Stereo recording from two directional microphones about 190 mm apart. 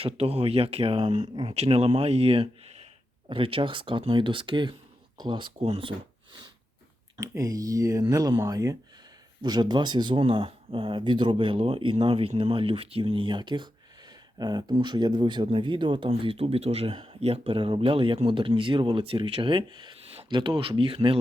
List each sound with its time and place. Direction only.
0.0 s speech: 30° right (ahead or behind)
7.2 s speech: 15° right (ahead or behind)